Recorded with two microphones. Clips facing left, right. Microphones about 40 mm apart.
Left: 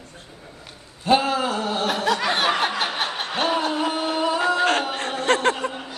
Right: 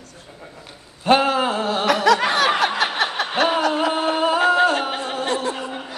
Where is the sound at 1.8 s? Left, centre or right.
Right.